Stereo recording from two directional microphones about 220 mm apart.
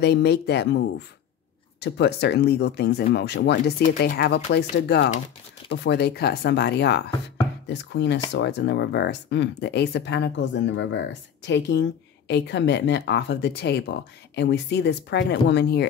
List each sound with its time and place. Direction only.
0.0 s speech: 50° left (ahead or behind)